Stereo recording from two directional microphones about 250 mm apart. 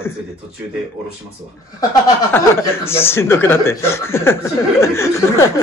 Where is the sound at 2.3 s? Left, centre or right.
Centre.